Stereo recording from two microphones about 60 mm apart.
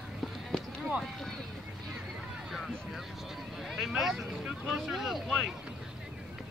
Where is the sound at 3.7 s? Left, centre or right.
Centre.